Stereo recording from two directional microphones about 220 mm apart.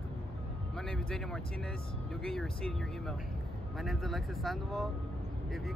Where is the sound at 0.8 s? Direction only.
Centre (ahead or behind).